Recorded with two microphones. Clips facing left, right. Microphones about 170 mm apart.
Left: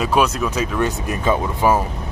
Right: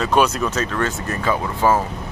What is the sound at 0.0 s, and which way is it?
Speech, 5° left (ahead or behind).